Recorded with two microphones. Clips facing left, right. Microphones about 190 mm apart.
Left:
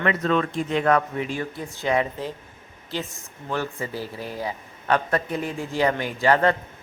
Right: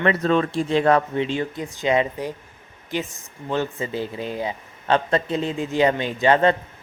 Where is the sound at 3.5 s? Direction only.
20° right (ahead or behind).